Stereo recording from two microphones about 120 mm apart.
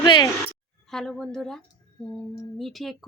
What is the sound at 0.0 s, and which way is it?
Speech, 35° left (ahead or behind).